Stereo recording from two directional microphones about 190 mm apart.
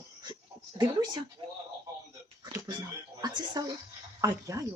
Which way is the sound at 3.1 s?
20° right (ahead or behind).